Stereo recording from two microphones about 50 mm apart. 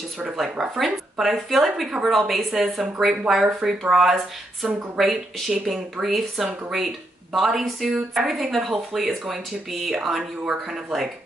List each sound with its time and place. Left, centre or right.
0.2 s speech: centre
0.7 s speech: centre